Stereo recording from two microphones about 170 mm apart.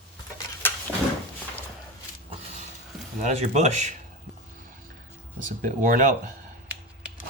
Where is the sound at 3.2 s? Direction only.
40° right (ahead or behind).